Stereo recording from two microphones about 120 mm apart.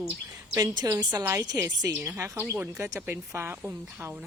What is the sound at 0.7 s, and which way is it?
Speech, 35° right (ahead or behind).